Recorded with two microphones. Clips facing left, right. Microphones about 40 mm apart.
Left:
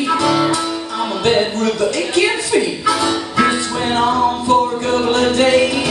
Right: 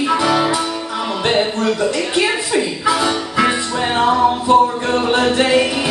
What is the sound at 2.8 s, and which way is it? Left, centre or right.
Music, centre.